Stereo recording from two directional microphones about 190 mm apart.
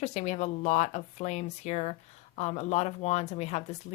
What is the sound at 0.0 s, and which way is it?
Speech, 35° left (ahead or behind).